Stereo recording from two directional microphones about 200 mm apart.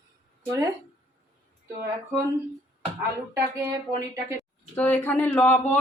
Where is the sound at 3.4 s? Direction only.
15° right (ahead or behind).